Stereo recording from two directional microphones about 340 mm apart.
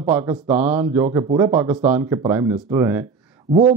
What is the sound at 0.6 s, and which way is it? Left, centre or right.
Speech, centre.